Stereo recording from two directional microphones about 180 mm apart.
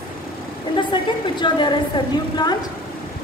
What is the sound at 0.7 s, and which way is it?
A woman's voice, 25° left (ahead or behind).